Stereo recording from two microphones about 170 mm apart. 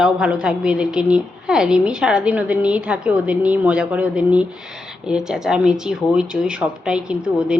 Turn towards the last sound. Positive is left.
turn(degrees=-5)  # may be behind; listen again after turning